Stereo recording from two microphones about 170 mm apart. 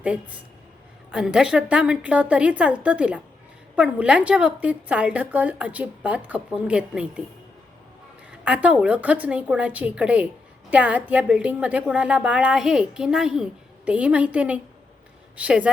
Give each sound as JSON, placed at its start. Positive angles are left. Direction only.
{"t": 0.0, "sound": "a woman's voice", "side_deg": -5}
{"t": 8.4, "sound": "a woman's voice", "side_deg": -10}